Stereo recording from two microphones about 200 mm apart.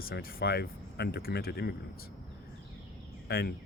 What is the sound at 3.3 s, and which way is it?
Speech, 50° left (ahead or behind).